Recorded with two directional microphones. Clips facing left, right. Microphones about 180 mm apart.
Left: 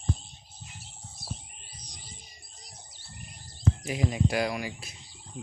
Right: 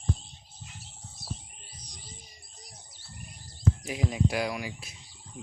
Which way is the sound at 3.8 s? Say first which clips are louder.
Left 3 dB; centre (ahead or behind).